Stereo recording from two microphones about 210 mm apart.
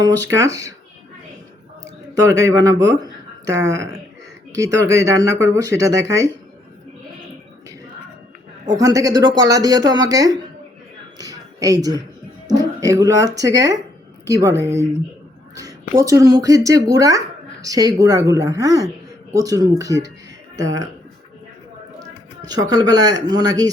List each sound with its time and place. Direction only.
0.3 s speech: 15° right (ahead or behind)
2.2 s speech: 15° right (ahead or behind)
8.7 s speech: 15° right (ahead or behind)
11.2 s a sound: 15° right (ahead or behind)
12.5 s speech: 15° right (ahead or behind)
15.5 s speech: 15° right (ahead or behind)
22.4 s speech: 20° right (ahead or behind)